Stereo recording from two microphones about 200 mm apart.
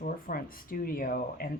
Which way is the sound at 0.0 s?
45° left (ahead or behind).